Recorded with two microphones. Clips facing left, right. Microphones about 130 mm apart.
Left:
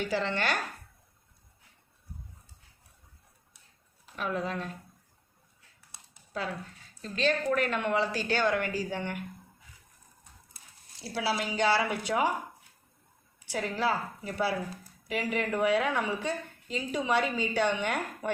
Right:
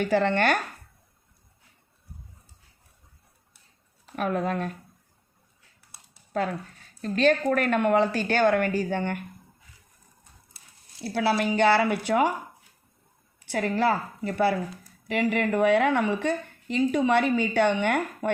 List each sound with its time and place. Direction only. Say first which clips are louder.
0.0 s a woman's voice: right 8 dB; 55° right (ahead or behind)
4.1 s a woman's voice: right 6 dB; 55° right (ahead or behind)
7.0 s a woman's voice: right 7 dB; 50° right (ahead or behind)
11.0 s a woman's voice: right 7 dB; 55° right (ahead or behind)
13.4 s a woman's voice: right 6 dB; 60° right (ahead or behind)